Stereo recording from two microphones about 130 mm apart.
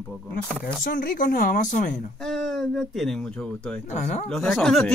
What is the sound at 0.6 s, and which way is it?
Speech, 90° left.